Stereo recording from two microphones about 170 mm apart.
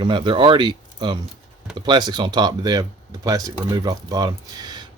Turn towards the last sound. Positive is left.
turn(degrees=-25)  # may be behind; listen again after turning